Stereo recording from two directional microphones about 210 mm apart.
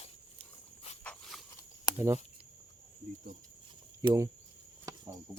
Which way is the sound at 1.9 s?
10° right (ahead or behind).